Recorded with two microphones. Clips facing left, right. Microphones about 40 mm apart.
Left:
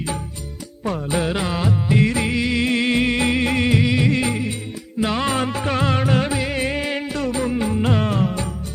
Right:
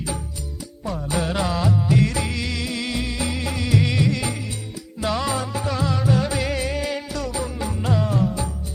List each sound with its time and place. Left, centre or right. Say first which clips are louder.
0.9 s music: left 1 dB; left
2.6 s music: left 8 dB; left
4.0 s music: left 4 dB; left
6.3 s music: left 1 dB; centre
6.6 s music: left 3 dB; left